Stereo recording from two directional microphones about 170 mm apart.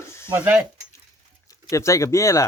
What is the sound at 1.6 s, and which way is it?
Speech, 20° left (ahead or behind).